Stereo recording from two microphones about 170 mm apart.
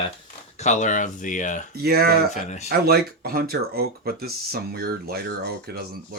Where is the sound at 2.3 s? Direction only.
45° left (ahead or behind).